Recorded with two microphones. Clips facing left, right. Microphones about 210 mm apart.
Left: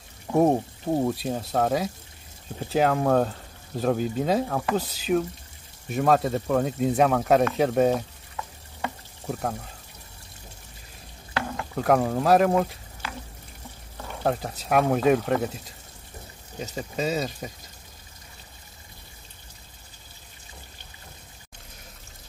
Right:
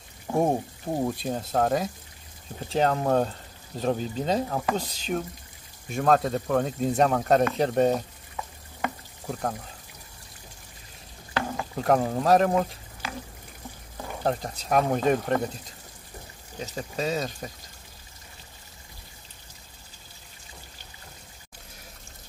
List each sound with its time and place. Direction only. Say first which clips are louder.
0.4 s speech: left 4 dB; 5° left (ahead or behind)
9.3 s speech: left 1 dB; 5° left (ahead or behind)
11.5 s speech: left 2 dB; centre (ahead or behind)
14.2 s speech: left 2 dB; 5° left (ahead or behind)
16.5 s speech: left 1 dB; centre (ahead or behind)